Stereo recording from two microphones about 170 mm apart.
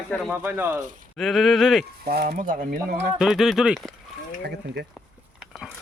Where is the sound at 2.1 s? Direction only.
65° right (ahead or behind).